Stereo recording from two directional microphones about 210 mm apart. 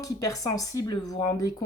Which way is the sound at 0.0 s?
15° left (ahead or behind).